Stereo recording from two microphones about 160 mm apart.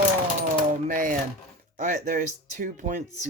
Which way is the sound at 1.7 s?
55° right (ahead or behind).